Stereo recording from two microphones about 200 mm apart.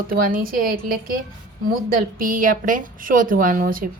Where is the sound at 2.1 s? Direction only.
45° right (ahead or behind).